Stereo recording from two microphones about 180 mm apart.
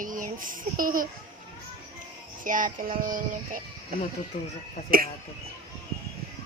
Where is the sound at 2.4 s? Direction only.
45° right (ahead or behind).